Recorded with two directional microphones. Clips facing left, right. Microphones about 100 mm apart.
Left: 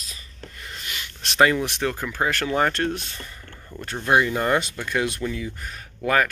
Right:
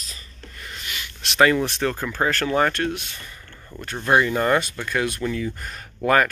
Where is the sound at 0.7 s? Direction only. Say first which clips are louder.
Right 1 dB; 30° left (ahead or behind).